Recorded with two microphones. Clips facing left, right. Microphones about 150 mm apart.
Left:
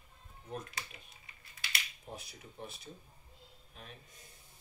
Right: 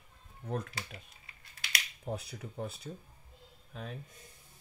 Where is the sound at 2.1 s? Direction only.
70° right (ahead or behind).